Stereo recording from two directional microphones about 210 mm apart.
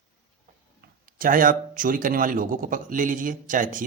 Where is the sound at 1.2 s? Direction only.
40° right (ahead or behind).